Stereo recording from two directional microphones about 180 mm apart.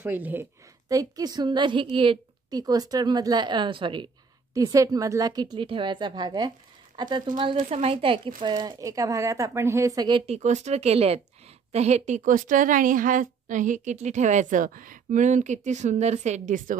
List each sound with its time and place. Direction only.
0.0 s a woman's voice: 10° right (ahead or behind)
7.5 s a woman's voice: 35° right (ahead or behind)